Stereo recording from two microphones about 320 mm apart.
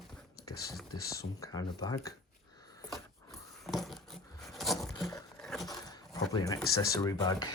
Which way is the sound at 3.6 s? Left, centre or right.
Centre.